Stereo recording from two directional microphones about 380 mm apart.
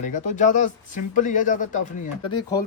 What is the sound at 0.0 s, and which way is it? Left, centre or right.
Speech, centre.